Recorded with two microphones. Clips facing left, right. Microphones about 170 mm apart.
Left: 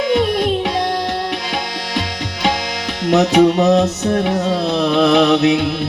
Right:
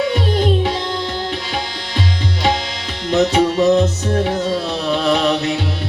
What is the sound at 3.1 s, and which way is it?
Music, 65° left (ahead or behind).